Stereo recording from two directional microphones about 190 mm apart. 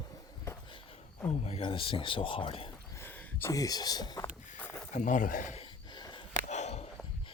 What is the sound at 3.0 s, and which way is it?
Speech, 15° left (ahead or behind).